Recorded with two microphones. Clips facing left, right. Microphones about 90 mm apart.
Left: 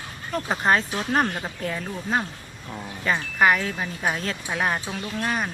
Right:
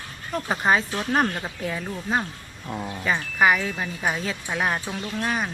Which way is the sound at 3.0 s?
Centre (ahead or behind).